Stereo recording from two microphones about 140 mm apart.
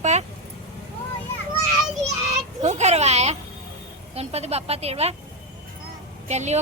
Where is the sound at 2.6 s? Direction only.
55° right (ahead or behind).